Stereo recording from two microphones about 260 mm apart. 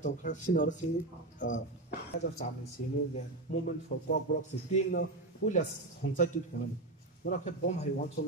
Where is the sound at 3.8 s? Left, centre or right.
Left.